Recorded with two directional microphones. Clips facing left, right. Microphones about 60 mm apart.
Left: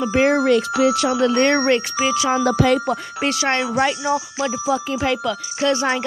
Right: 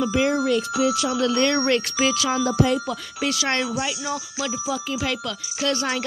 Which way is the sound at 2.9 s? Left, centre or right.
Left.